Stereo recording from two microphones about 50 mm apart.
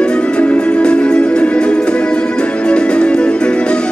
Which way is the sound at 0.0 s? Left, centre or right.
Centre.